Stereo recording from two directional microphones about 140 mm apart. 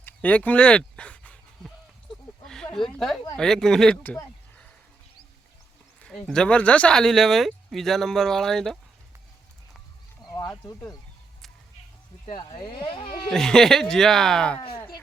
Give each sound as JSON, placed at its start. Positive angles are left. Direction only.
{"t": 0.0, "sound": "a sound", "side_deg": 10}
{"t": 2.7, "sound": "speech", "side_deg": 0}
{"t": 6.2, "sound": "speech", "side_deg": 5}
{"t": 10.2, "sound": "a sound", "side_deg": 25}
{"t": 12.5, "sound": "speech", "side_deg": 40}
{"t": 13.3, "sound": "speech", "side_deg": 5}